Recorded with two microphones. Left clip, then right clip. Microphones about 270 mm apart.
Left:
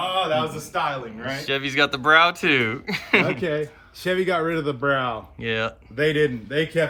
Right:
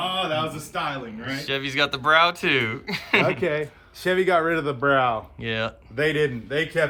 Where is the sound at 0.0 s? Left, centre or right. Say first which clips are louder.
Left 2 dB; centre.